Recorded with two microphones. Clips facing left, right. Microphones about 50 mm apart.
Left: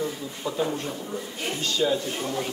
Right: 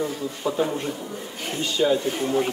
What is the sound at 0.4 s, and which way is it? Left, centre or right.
A man's voice, centre.